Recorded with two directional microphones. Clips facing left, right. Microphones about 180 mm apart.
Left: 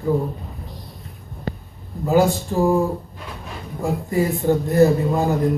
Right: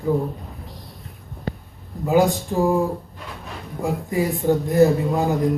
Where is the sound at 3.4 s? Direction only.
Centre (ahead or behind).